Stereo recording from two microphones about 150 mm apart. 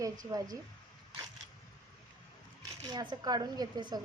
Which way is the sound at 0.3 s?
25° right (ahead or behind).